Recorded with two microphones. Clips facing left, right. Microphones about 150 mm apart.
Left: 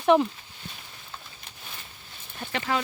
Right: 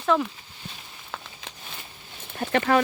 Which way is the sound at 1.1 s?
90° right.